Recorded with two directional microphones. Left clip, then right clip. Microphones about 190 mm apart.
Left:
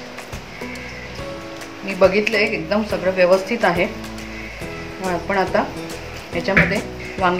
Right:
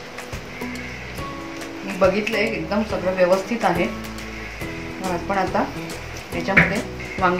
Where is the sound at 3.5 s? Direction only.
30° left (ahead or behind).